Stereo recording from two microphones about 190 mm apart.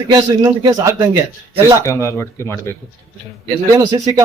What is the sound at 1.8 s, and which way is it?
Speech, 15° left (ahead or behind).